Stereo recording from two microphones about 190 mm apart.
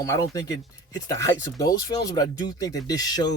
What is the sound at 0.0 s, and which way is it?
Speech, 15° left (ahead or behind).